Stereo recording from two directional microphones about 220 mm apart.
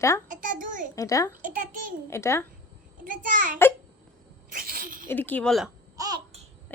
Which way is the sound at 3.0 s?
35° right (ahead or behind).